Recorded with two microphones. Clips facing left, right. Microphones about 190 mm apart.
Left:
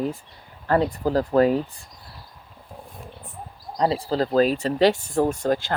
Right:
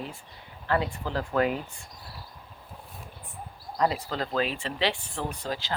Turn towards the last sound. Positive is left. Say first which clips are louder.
# left 10 dB
turn(degrees=50)  # may be behind; listen again after turning